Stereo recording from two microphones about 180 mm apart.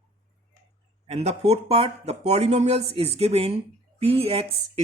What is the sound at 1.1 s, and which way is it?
Speech, 35° right (ahead or behind).